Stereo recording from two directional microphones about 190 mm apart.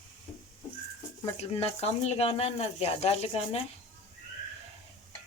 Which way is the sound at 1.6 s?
35° left (ahead or behind).